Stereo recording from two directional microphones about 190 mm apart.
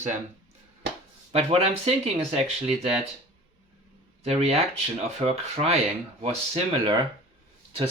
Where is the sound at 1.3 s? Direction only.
30° right (ahead or behind).